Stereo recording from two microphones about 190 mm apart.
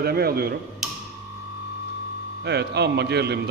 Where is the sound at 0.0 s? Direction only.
55° right (ahead or behind).